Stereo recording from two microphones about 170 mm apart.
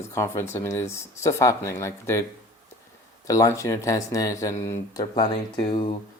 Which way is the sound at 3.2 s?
20° left (ahead or behind).